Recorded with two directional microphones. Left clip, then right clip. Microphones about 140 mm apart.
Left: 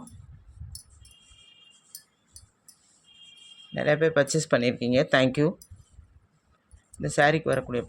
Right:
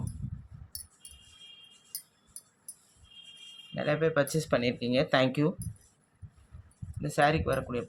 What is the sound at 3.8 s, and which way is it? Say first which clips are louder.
Speech: left 5 dB; 55° left (ahead or behind).